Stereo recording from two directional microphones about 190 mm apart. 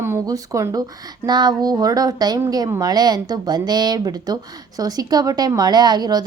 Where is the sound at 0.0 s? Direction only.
15° right (ahead or behind).